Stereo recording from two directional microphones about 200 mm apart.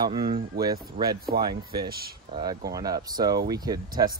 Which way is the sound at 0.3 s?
20° right (ahead or behind).